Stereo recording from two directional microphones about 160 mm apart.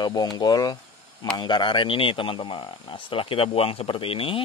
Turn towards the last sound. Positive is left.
turn(degrees=35)  # may be behind; listen again after turning